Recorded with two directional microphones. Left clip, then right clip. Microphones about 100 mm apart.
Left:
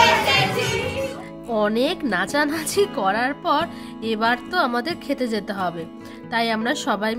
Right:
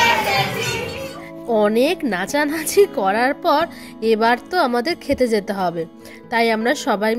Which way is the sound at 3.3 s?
55° right (ahead or behind).